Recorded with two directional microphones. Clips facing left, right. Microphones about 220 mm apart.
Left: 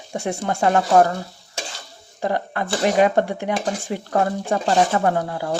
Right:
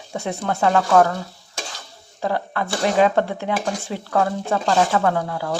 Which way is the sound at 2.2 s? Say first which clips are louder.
Even; 15° left (ahead or behind).